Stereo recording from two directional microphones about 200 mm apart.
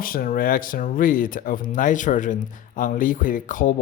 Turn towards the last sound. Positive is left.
turn(degrees=40)  # may be behind; listen again after turning